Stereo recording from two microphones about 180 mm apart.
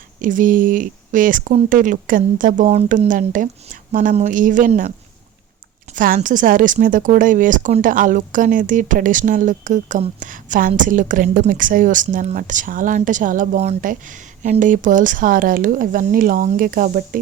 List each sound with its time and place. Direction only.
0.2 s speech: 50° right (ahead or behind)
5.9 s speech: 45° right (ahead or behind)